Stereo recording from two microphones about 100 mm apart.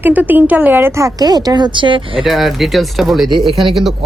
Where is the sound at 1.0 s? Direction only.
40° right (ahead or behind); by 2.3 s 55° right (ahead or behind).